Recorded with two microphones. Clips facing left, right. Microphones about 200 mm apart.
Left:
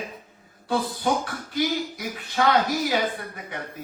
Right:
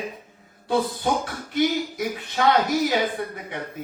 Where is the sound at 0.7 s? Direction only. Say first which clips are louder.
Right 2 dB; 25° right (ahead or behind).